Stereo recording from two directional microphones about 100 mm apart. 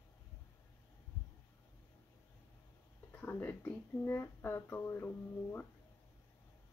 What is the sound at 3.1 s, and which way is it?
Speech, 20° left (ahead or behind).